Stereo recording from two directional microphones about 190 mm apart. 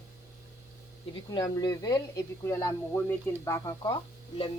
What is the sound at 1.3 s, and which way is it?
Speech, 20° left (ahead or behind).